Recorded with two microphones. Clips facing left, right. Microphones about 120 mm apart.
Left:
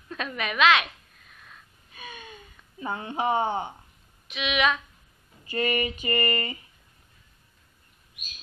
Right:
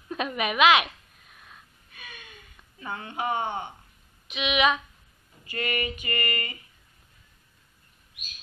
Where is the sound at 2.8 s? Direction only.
25° left (ahead or behind).